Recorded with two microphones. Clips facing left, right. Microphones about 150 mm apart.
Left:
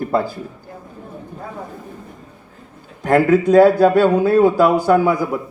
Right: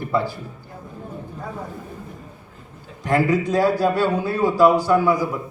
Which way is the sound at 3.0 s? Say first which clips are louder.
Left 6 dB; 55° left (ahead or behind).